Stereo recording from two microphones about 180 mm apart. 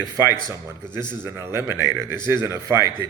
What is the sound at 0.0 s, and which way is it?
A man's voice, 15° right (ahead or behind).